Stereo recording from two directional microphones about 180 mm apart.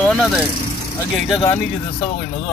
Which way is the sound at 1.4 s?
35° left (ahead or behind).